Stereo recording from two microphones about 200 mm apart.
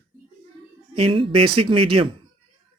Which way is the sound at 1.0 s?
25° right (ahead or behind).